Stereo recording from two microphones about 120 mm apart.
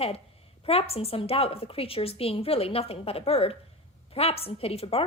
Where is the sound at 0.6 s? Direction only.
55° left (ahead or behind).